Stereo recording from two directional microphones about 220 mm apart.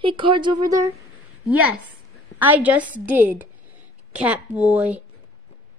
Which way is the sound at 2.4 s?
5° right (ahead or behind).